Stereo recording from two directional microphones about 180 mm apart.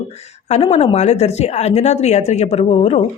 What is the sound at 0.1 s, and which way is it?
Speech, 35° left (ahead or behind).